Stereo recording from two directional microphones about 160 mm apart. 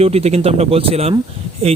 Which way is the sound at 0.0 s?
40° right (ahead or behind).